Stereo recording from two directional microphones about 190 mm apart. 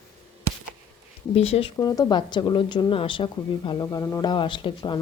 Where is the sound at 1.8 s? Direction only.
20° left (ahead or behind).